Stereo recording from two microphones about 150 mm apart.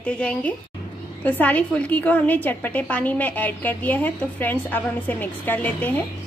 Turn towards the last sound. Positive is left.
turn(degrees=10)  # may be behind; listen again after turning